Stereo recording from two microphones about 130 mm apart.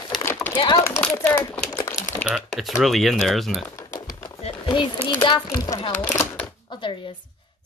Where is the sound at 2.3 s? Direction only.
5° right (ahead or behind).